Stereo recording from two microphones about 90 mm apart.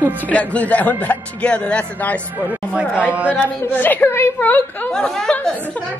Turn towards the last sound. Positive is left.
turn(degrees=5)  # may be behind; listen again after turning